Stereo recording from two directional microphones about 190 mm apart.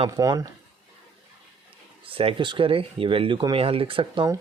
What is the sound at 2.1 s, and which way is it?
Speech, 30° right (ahead or behind).